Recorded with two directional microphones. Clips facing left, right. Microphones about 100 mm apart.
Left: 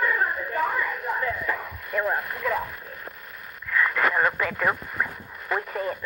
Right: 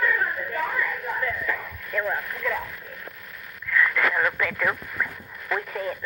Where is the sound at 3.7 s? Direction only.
40° left (ahead or behind).